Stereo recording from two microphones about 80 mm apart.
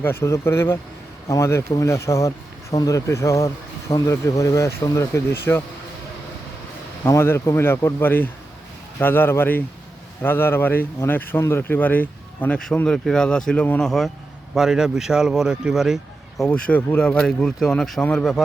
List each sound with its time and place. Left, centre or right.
0.0 s speech: left
7.0 s speech: left
12.9 s speech: centre
14.5 s speech: centre
16.5 s speech: centre